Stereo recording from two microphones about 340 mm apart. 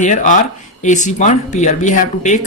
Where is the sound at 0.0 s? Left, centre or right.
Left.